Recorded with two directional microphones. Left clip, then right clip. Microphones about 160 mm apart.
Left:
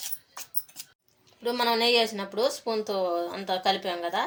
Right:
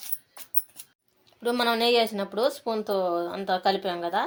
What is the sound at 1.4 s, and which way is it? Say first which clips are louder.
Speech: right 1 dB; 45° right (ahead or behind).